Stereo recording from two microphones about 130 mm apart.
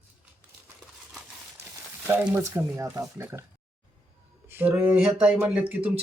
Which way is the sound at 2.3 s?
25° right (ahead or behind).